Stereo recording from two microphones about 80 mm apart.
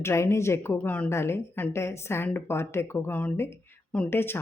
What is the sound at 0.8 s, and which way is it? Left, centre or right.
Speech, centre.